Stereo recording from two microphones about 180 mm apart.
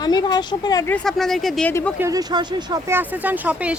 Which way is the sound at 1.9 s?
20° right (ahead or behind).